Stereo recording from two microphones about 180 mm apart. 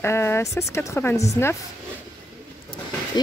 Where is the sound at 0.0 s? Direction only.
15° left (ahead or behind).